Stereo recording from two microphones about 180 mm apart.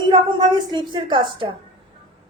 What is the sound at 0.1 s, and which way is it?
A woman's voice, 25° right (ahead or behind).